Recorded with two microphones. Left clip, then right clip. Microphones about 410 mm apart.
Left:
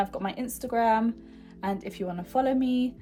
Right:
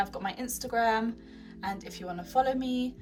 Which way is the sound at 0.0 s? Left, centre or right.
Centre.